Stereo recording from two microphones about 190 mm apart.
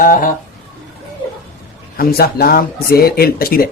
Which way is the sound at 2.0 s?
50° left (ahead or behind).